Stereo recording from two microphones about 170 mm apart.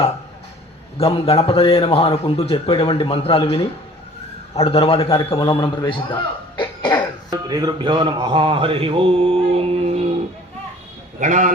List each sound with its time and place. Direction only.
0.9 s a man's voice: 35° left (ahead or behind)
7.3 s music: 20° right (ahead or behind)
11.2 s a man's voice: 45° right (ahead or behind)